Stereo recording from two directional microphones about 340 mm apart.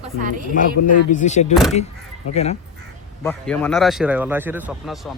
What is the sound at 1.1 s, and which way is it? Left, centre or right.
Speech, left.